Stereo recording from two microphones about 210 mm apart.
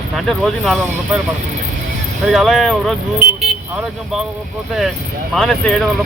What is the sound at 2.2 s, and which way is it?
Speech, centre (ahead or behind).